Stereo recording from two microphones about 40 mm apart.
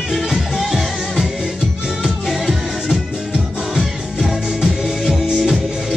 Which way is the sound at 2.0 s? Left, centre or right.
Centre.